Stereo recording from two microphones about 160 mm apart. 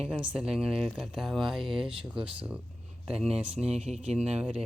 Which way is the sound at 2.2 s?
10° right (ahead or behind).